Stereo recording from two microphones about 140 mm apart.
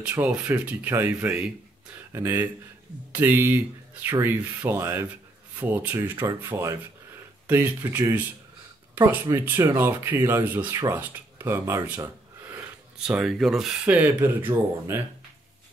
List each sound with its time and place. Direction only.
0.1 s speech: 10° right (ahead or behind)
13.0 s speech: 5° right (ahead or behind)